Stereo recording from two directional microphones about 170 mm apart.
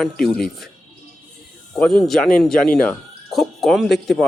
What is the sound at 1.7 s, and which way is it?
Speech, centre (ahead or behind).